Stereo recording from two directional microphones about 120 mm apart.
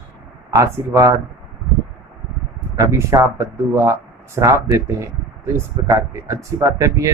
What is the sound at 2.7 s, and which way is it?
Speech, 25° right (ahead or behind).